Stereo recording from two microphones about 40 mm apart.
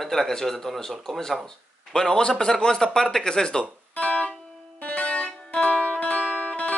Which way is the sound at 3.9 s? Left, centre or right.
Left.